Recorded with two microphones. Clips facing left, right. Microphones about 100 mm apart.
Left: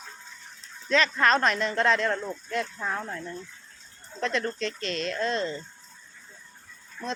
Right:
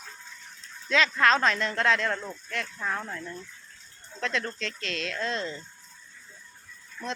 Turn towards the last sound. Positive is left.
turn(degrees=25)  # may be behind; listen again after turning